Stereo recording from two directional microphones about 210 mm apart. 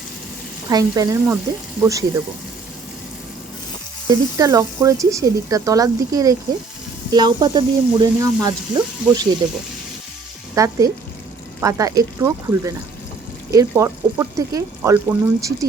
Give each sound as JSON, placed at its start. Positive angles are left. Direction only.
{"t": 0.7, "sound": "speech", "side_deg": -15}
{"t": 4.4, "sound": "speech", "side_deg": -15}
{"t": 10.5, "sound": "speech", "side_deg": -15}